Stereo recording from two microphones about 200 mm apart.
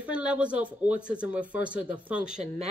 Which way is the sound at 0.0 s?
5° right (ahead or behind).